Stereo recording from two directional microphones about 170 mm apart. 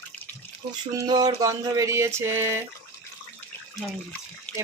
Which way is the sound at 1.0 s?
20° right (ahead or behind).